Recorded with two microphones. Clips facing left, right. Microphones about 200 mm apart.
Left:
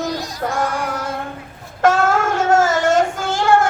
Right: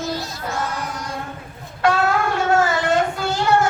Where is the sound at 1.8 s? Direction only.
45° left (ahead or behind).